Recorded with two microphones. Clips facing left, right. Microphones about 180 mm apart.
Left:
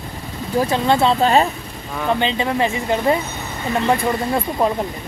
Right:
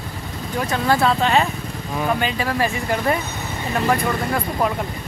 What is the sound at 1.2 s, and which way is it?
Speech, 35° left (ahead or behind).